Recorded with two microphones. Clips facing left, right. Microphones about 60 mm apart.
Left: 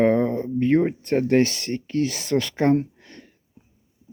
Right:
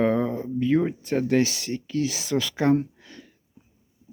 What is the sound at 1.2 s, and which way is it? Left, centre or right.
Speech, left.